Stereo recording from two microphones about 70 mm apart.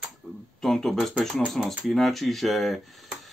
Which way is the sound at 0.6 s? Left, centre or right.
Centre.